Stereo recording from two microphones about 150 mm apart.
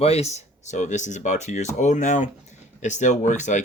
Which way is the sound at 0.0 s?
45° left (ahead or behind).